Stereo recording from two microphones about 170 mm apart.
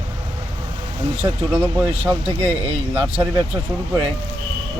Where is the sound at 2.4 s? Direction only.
35° right (ahead or behind).